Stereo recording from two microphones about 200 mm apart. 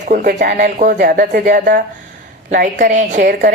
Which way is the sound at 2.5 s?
40° right (ahead or behind).